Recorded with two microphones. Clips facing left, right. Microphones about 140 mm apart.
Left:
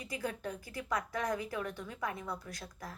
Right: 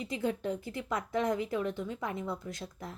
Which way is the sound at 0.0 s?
25° right (ahead or behind).